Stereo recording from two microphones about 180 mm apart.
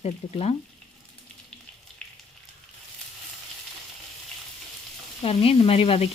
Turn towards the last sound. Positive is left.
turn(degrees=30)  # may be behind; listen again after turning